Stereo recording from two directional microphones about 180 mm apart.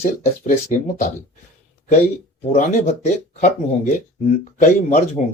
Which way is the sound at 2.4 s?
40° left (ahead or behind).